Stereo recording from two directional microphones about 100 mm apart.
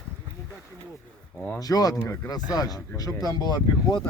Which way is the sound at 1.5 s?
40° left (ahead or behind).